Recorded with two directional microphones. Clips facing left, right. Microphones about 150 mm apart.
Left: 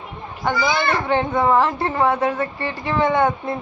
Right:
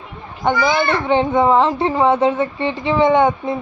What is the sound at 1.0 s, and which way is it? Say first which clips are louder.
A woman's voice: right 5 dB; 20° right (ahead or behind).